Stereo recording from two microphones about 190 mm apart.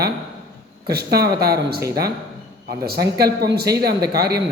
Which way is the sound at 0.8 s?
55° right (ahead or behind).